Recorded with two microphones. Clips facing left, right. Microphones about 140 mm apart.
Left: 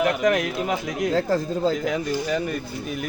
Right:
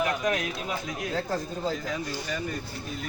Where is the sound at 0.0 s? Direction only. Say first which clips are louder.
Left 6 dB; 70° left (ahead or behind).